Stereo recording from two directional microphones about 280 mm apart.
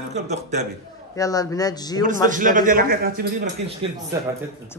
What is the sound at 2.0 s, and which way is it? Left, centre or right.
A man's voice, right.